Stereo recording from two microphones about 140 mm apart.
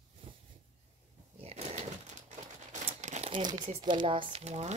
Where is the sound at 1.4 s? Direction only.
50° right (ahead or behind).